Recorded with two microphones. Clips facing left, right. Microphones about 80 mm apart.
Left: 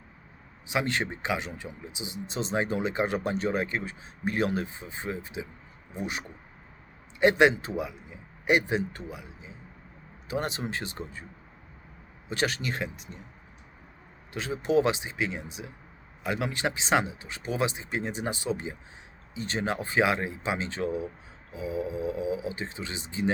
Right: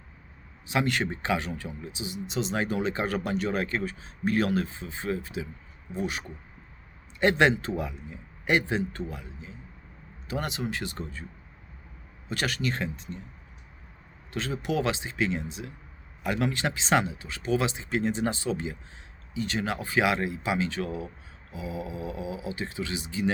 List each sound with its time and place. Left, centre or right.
0.7 s a man's voice: left
10.2 s speech: left
10.9 s a man's voice: centre
12.3 s speech: left
14.3 s speech: centre